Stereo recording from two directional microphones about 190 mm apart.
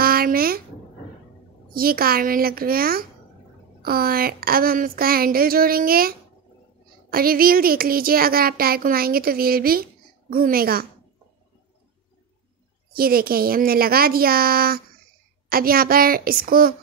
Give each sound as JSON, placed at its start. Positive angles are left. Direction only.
{"t": 0.0, "sound": "a sound", "side_deg": -50}
{"t": 1.7, "sound": "speech", "side_deg": -50}
{"t": 12.9, "sound": "speech", "side_deg": -50}